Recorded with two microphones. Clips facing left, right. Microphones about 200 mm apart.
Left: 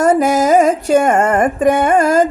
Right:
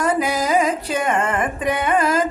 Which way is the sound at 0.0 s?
45° left (ahead or behind).